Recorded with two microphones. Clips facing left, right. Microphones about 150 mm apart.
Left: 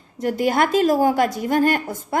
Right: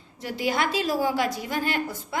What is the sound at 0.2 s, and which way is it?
A woman's voice, 50° left (ahead or behind).